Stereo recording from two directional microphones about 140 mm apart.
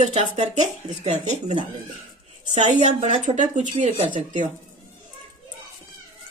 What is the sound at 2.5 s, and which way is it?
Speech, 60° right (ahead or behind).